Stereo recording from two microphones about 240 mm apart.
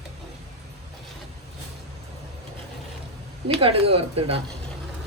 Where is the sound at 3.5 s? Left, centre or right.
Right.